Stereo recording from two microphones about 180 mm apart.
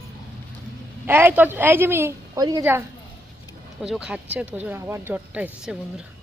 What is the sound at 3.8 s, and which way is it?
A woman's voice, 5° right (ahead or behind).